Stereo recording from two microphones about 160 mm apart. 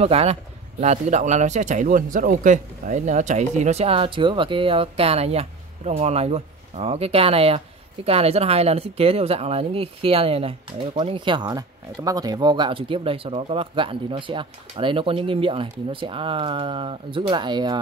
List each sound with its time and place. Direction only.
0.0 s speech: 40° right (ahead or behind)